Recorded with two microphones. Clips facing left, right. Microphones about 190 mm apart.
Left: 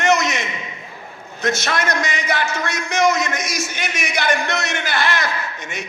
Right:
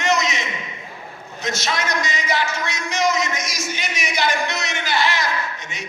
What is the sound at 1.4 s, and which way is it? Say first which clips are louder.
A man's voice: left 4 dB; 55° left (ahead or behind).